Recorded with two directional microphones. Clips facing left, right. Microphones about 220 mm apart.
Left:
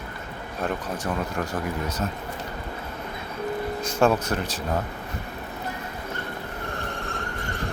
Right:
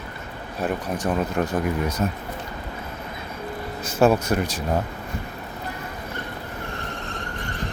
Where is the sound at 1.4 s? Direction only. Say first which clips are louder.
Right 5 dB; 25° right (ahead or behind).